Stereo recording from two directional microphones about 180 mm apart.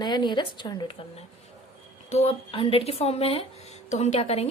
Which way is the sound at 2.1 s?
35° left (ahead or behind).